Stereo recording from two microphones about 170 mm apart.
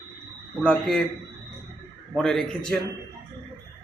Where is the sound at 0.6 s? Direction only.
5° left (ahead or behind).